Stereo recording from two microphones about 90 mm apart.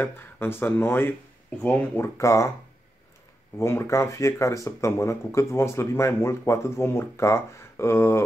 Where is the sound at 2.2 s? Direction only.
35° left (ahead or behind).